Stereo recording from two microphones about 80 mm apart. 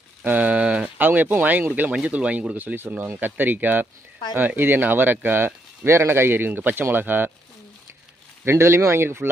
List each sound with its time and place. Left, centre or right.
0.2 s a sound: right
1.0 s speech: right
8.5 s speech: right